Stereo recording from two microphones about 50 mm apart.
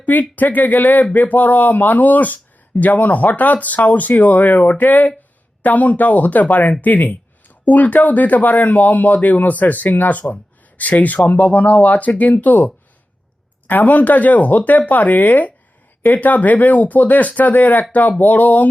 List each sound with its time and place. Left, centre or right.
0.0 s speech: left
6.8 s a sound: left
7.7 s speech: left